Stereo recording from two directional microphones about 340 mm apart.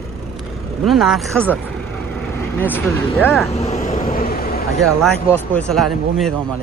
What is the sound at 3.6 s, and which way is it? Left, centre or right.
Vehicle, centre.